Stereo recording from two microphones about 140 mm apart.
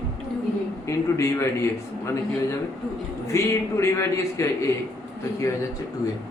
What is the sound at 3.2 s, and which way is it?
A man's voice, 20° left (ahead or behind).